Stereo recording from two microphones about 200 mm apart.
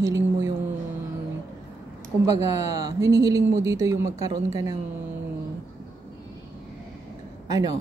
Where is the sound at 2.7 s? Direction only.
15° right (ahead or behind).